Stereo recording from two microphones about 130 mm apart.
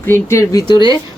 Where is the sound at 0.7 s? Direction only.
35° left (ahead or behind).